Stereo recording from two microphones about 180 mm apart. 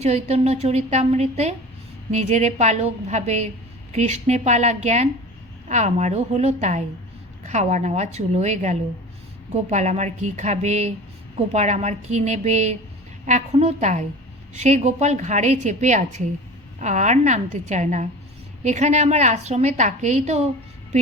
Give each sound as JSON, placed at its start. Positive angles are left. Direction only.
{"t": 0.0, "sound": "a woman's voice", "side_deg": -35}